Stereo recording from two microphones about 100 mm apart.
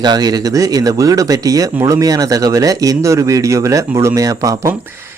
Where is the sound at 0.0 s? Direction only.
40° right (ahead or behind).